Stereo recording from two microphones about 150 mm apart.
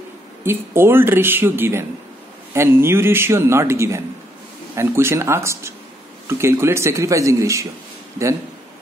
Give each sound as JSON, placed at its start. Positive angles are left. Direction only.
{"t": 0.4, "sound": "a man's voice", "side_deg": -15}